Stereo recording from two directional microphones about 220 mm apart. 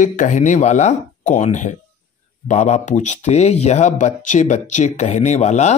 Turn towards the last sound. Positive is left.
turn(degrees=30)  # may be behind; listen again after turning